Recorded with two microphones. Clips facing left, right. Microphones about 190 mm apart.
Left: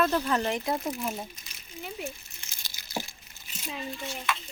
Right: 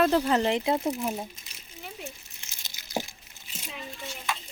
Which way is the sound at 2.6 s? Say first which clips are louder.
Right 3 dB; 20° right (ahead or behind).